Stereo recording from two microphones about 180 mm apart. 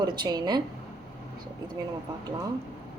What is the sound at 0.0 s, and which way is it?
Speech, 20° right (ahead or behind).